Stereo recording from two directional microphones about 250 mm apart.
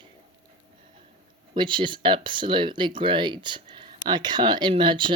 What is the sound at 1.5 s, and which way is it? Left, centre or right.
Speech, centre.